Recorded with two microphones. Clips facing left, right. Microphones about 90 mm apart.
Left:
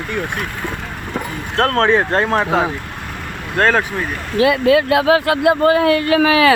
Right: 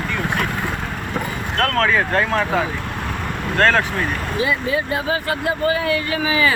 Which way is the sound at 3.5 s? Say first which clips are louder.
Left 1 dB; 15° left (ahead or behind).